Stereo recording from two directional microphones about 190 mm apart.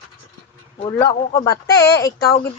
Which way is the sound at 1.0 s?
15° left (ahead or behind).